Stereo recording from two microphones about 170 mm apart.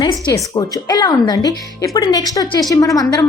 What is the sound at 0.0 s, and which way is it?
Speech, 25° left (ahead or behind).